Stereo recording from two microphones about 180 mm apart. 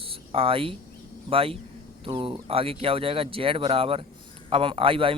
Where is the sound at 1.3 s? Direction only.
30° right (ahead or behind).